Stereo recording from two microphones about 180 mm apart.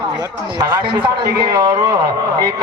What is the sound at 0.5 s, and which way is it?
A man's voice, 25° right (ahead or behind).